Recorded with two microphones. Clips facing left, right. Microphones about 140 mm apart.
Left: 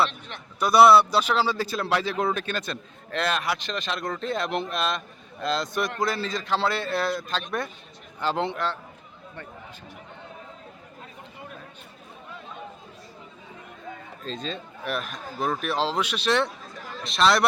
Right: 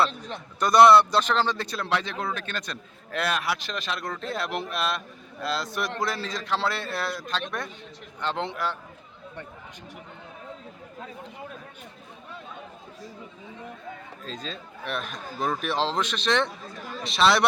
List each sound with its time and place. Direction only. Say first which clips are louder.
0.6 s speech: even; 5° left (ahead or behind)
2.1 s a man's voice: left 5 dB; 15° left (ahead or behind)
3.1 s speech: left 1 dB; 5° right (ahead or behind)
14.3 s speech: left 4 dB; centre (ahead or behind)